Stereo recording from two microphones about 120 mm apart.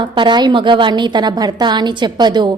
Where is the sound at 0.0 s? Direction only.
40° right (ahead or behind).